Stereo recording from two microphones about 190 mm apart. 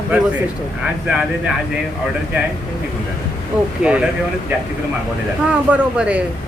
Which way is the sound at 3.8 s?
5° right (ahead or behind).